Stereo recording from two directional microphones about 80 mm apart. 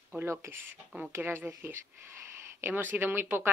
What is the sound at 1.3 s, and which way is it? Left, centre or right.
Speech, right.